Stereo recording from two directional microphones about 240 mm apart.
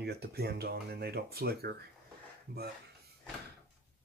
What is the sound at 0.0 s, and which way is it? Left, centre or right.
Speech, right.